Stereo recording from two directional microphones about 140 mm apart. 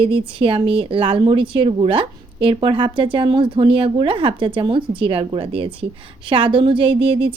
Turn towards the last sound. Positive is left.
turn(degrees=-40)  # may be behind; listen again after turning